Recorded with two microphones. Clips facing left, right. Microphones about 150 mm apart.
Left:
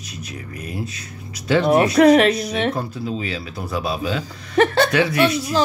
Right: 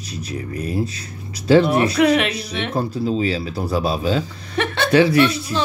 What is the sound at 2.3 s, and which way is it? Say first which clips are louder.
Speech: left 6 dB; 30° right (ahead or behind).